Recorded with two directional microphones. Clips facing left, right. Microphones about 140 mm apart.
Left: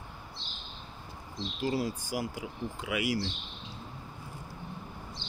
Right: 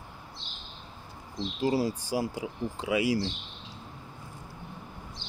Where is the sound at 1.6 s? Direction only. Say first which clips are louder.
Right 4 dB; 35° right (ahead or behind).